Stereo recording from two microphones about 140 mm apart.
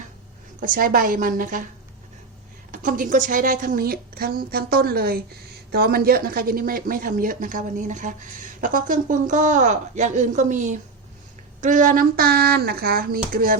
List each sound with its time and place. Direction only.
0.6 s a woman's voice: 80° right
2.7 s a woman's voice: 70° right (ahead or behind); by 13.6 s 90° right